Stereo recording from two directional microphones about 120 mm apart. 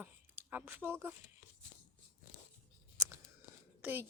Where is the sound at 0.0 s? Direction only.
15° right (ahead or behind).